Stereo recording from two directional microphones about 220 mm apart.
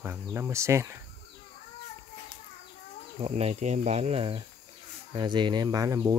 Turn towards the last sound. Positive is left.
turn(degrees=-15)  # may be behind; listen again after turning